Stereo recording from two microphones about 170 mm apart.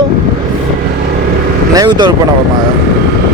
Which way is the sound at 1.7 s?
25° right (ahead or behind).